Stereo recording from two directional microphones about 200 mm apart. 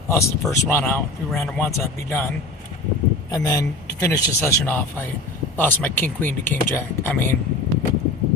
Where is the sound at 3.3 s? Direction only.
15° left (ahead or behind).